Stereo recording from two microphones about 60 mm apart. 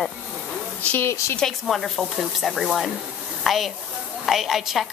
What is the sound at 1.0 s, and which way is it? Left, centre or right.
Speech, left.